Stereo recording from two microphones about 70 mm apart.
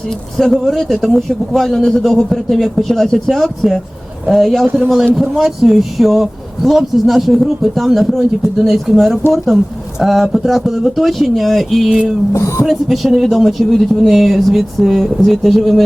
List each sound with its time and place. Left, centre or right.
0.3 s speech: centre
12.3 s speech: left
12.6 s speech: centre